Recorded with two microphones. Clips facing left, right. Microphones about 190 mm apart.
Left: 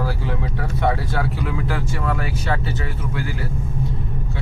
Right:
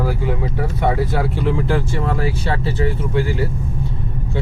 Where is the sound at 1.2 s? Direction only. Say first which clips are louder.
Right 5 dB; 30° right (ahead or behind).